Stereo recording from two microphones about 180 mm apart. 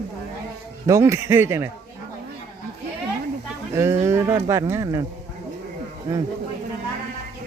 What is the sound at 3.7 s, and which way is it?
Speech, 15° right (ahead or behind).